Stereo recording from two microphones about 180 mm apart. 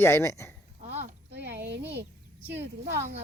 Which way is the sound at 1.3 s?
70° right (ahead or behind).